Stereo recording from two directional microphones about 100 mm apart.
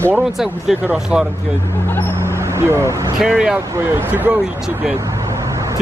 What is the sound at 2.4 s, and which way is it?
Speech, 25° right (ahead or behind).